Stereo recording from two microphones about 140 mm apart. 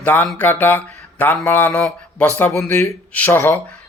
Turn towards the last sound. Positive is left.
turn(degrees=15)  # may be behind; listen again after turning